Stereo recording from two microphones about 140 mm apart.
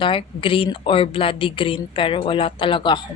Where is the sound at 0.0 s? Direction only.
40° left (ahead or behind).